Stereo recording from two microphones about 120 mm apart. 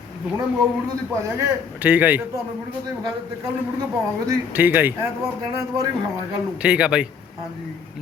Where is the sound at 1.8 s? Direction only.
15° right (ahead or behind).